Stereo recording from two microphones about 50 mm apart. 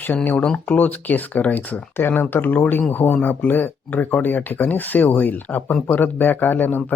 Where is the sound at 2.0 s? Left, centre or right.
Left.